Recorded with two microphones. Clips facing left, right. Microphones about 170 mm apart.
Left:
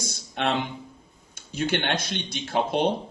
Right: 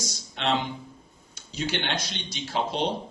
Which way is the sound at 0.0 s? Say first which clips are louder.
Left 3 dB; 55° left (ahead or behind).